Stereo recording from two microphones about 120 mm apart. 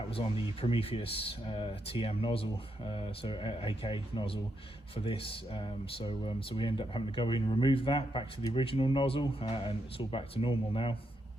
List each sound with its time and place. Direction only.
0.1 s speech: 50° left (ahead or behind)